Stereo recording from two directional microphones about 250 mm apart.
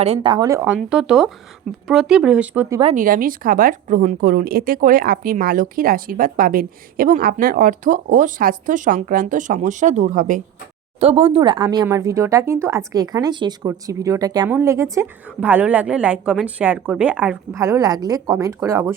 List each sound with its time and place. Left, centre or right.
0.0 s speech: right
2.8 s a woman's voice: right; by 18.9 s centre